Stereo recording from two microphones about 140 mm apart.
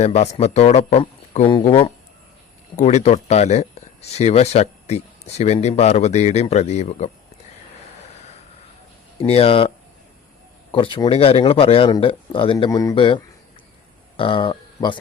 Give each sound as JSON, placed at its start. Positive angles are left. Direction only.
{"t": 0.0, "sound": "speech", "side_deg": 50}
{"t": 2.7, "sound": "speech", "side_deg": 55}
{"t": 9.1, "sound": "speech", "side_deg": 45}
{"t": 12.7, "sound": "a man's voice", "side_deg": 25}
{"t": 13.0, "sound": "speech", "side_deg": 40}